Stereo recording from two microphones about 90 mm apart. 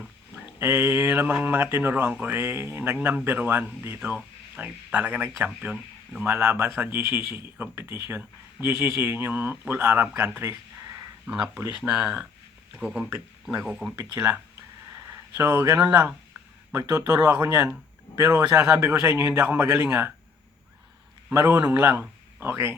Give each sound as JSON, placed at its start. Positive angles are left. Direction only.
{"t": 0.6, "sound": "speech", "side_deg": -25}
{"t": 11.3, "sound": "speech", "side_deg": -10}
{"t": 13.7, "sound": "speech", "side_deg": -5}
{"t": 14.1, "sound": "speech", "side_deg": -25}
{"t": 16.7, "sound": "speech", "side_deg": -35}
{"t": 17.2, "sound": "speech", "side_deg": -25}
{"t": 21.3, "sound": "speech", "side_deg": -30}